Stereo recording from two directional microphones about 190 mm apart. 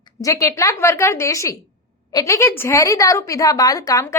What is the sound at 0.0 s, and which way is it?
A woman's voice, 15° left (ahead or behind).